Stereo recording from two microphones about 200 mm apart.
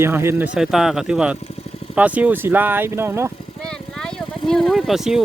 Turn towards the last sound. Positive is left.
turn(degrees=0)  # may be behind; listen again after turning